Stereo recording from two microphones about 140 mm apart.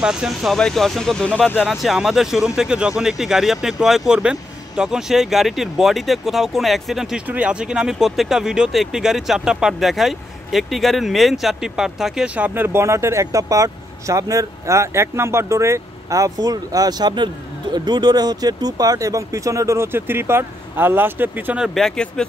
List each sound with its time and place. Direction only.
0.0 s speech: 5° right (ahead or behind)
1.6 s speech: centre (ahead or behind)